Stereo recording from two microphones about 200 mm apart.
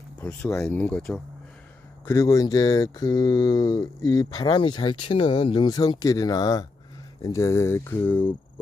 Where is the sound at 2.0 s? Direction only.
15° left (ahead or behind).